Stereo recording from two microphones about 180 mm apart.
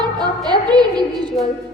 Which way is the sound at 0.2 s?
25° right (ahead or behind).